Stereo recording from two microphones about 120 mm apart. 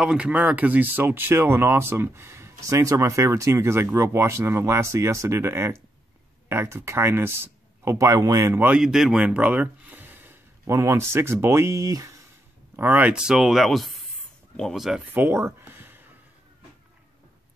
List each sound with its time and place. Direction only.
0.0 s speech: 10° right (ahead or behind); by 8.6 s 25° right (ahead or behind)
8.6 s speech: 5° right (ahead or behind); by 12.2 s 30° right (ahead or behind)
12.7 s speech: 15° right (ahead or behind); by 15.0 s centre (ahead or behind)
15.1 s a sound: 20° right (ahead or behind)